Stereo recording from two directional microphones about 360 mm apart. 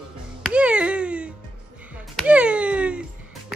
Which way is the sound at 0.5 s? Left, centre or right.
Centre.